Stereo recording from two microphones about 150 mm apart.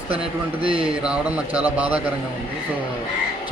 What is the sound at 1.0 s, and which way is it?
Speech, 10° right (ahead or behind).